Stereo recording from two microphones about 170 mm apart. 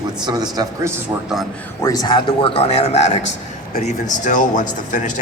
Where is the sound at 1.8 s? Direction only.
20° left (ahead or behind).